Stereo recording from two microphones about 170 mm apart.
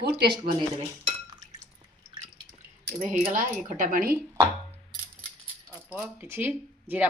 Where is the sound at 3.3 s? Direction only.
50° right (ahead or behind).